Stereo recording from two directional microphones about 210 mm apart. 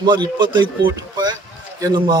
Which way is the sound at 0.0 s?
20° right (ahead or behind).